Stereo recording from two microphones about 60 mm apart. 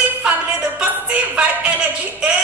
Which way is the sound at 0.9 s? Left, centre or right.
Right.